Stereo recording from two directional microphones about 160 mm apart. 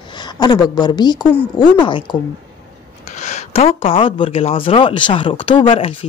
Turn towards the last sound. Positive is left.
turn(degrees=35)  # may be behind; listen again after turning